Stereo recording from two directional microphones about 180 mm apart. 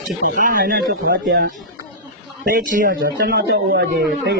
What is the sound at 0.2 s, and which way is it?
Speech, 50° right (ahead or behind).